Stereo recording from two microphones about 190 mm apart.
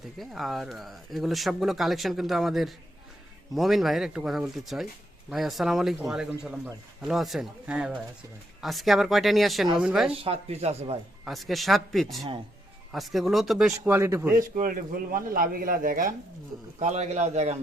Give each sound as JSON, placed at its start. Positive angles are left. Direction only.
{"t": 0.2, "sound": "speech", "side_deg": 0}
{"t": 10.2, "sound": "speech", "side_deg": -30}
{"t": 11.3, "sound": "speech", "side_deg": 0}
{"t": 13.7, "sound": "a man's voice", "side_deg": -15}
{"t": 14.3, "sound": "a man's voice", "side_deg": -45}